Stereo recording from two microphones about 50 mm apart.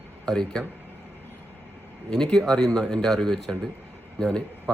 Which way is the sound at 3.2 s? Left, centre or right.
Centre.